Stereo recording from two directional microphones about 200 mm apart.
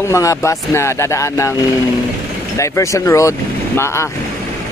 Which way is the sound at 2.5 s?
15° left (ahead or behind).